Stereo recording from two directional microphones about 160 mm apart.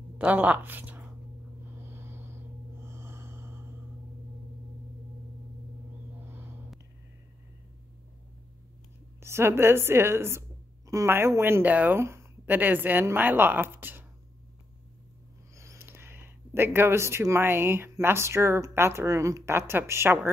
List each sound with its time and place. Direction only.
0.2 s a woman's voice: 10° right (ahead or behind)
1.8 s a sound: 15° right (ahead or behind)
2.8 s snort: 15° right (ahead or behind)
6.2 s a sound: 15° right (ahead or behind)
9.2 s speech: 15° right (ahead or behind)
15.5 s speech: 20° right (ahead or behind)